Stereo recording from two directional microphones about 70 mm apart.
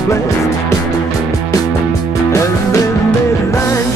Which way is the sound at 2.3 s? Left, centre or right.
Left.